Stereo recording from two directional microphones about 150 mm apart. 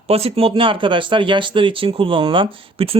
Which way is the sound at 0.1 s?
40° right (ahead or behind).